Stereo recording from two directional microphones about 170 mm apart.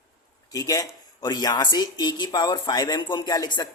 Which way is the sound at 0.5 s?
20° left (ahead or behind).